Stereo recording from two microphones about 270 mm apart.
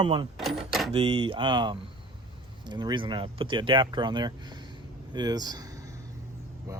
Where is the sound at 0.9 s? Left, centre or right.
Centre.